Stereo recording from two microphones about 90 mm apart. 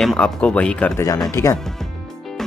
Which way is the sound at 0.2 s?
15° left (ahead or behind).